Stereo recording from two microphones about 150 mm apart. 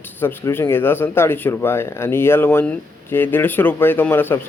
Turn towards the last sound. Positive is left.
turn(degrees=15)  # may be behind; listen again after turning